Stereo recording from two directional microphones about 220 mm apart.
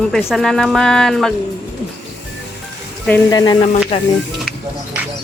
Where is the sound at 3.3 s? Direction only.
20° left (ahead or behind).